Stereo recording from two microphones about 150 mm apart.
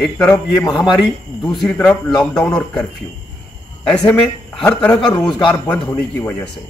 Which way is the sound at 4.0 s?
15° left (ahead or behind).